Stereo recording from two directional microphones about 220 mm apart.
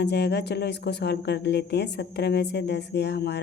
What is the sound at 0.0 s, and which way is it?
Speech, 50° left (ahead or behind).